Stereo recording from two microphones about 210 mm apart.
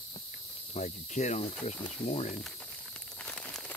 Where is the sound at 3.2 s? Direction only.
5° left (ahead or behind).